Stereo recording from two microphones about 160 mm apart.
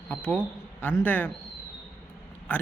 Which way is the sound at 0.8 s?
10° left (ahead or behind).